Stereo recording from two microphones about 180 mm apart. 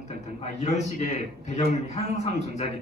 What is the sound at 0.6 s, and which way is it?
A man's voice, 40° left (ahead or behind).